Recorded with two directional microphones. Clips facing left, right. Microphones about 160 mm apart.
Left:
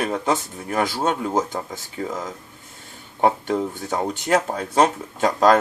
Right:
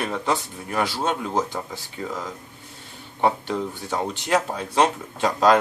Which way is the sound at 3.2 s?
45° left (ahead or behind).